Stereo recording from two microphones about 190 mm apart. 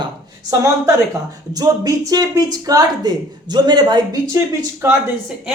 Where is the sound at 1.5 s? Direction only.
20° right (ahead or behind).